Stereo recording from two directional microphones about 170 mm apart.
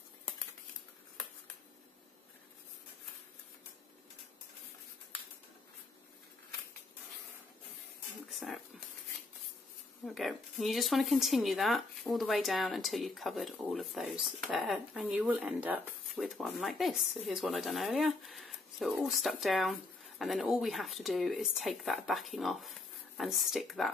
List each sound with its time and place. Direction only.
8.3 s dog: centre (ahead or behind)
10.0 s speech: centre (ahead or behind)